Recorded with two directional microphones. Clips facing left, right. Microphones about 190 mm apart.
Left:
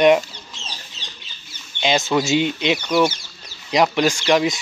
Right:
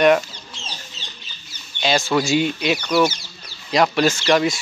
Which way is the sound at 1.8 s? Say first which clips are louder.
Even; 20° left (ahead or behind).